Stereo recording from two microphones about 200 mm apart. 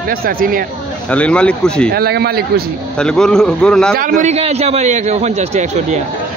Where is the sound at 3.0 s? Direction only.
5° left (ahead or behind).